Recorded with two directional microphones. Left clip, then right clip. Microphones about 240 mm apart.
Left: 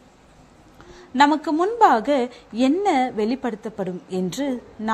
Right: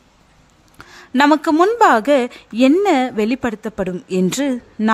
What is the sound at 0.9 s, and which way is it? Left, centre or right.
A woman's voice, right.